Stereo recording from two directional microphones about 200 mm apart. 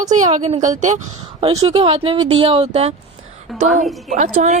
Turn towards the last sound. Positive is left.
turn(degrees=-40)  # may be behind; listen again after turning